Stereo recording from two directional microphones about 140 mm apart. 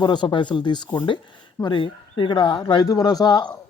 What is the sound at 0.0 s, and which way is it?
Speech, 30° left (ahead or behind).